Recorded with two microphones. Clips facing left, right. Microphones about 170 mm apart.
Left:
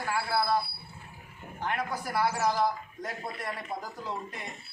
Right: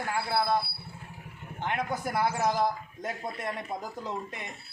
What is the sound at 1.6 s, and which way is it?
Speech, 20° right (ahead or behind).